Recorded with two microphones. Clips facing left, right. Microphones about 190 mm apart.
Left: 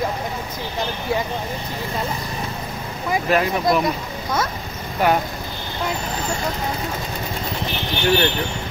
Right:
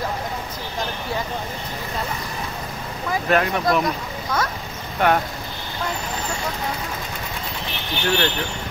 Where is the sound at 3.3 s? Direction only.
Centre (ahead or behind).